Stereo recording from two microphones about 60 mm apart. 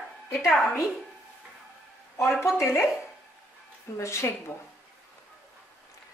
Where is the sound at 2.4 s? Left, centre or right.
Left.